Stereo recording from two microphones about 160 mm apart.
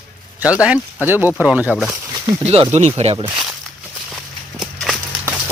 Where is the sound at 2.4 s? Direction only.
40° right (ahead or behind).